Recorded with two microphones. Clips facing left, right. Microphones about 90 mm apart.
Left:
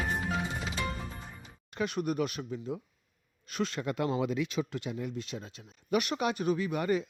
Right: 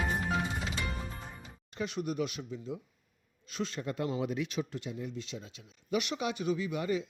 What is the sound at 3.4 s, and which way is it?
Speech, 60° left (ahead or behind).